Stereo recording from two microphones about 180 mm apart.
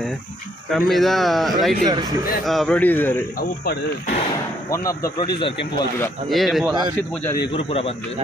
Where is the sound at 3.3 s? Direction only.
60° left (ahead or behind).